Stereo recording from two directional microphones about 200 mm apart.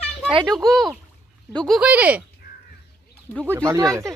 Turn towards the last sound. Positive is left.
turn(degrees=-15)  # may be behind; listen again after turning